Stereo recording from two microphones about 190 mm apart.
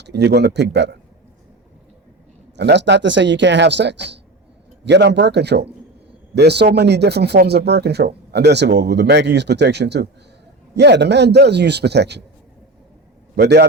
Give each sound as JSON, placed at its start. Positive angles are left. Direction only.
{"t": 0.0, "sound": "speech", "side_deg": -60}
{"t": 2.6, "sound": "speech", "side_deg": -65}
{"t": 13.3, "sound": "speech", "side_deg": -60}